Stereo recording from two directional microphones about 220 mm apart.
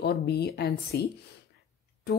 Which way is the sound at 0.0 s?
50° left (ahead or behind).